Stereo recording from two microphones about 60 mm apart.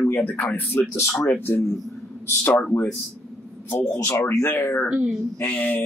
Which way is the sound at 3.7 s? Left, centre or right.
Left.